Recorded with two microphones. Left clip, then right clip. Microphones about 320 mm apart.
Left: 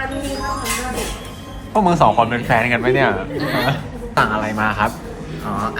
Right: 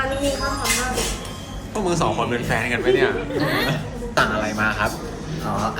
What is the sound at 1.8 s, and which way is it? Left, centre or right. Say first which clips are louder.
A man's voice: left 7 dB; centre.